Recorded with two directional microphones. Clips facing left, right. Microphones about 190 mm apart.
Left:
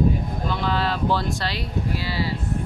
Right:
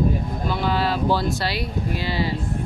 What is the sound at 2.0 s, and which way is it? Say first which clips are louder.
Speech: right 2 dB; 20° right (ahead or behind).